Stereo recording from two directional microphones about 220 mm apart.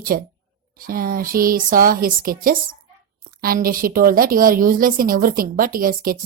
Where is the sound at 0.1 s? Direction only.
40° right (ahead or behind).